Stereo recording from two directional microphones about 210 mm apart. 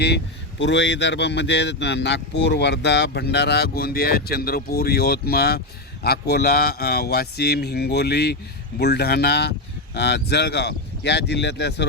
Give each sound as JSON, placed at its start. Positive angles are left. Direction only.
{"t": 0.6, "sound": "speech", "side_deg": 60}